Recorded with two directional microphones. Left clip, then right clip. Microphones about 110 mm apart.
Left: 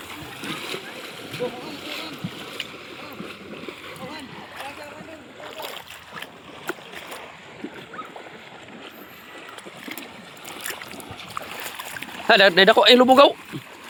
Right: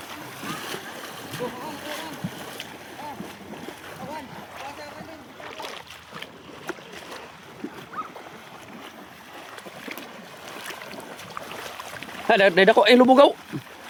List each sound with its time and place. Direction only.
0.4 s boat: 55° right (ahead or behind)
3.0 s splash: 85° right
12.3 s speech: 15° right (ahead or behind); by 13.3 s 35° right (ahead or behind)